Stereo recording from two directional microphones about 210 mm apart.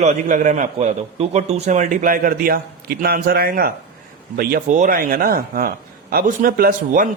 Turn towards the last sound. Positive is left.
turn(degrees=-40)  # may be behind; listen again after turning